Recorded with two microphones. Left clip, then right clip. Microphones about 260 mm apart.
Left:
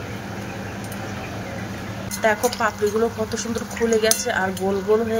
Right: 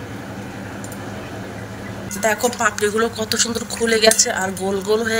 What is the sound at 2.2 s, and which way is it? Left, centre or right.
Speech, centre.